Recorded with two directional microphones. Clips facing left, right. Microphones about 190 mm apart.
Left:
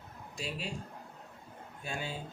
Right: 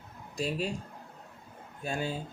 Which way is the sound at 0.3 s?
40° right (ahead or behind).